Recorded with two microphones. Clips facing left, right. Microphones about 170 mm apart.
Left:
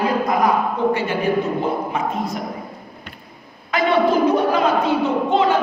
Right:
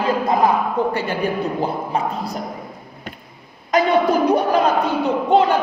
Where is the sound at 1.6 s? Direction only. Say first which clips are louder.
Even; 35° right (ahead or behind).